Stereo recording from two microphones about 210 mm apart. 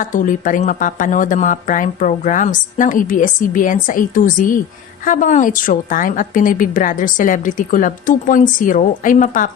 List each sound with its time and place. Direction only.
0.0 s a woman's voice: 40° left (ahead or behind)